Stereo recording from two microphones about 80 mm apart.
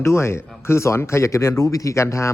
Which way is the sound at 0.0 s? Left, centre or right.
Left.